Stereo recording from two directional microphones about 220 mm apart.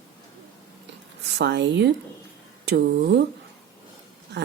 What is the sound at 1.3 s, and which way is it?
Speech, 50° right (ahead or behind).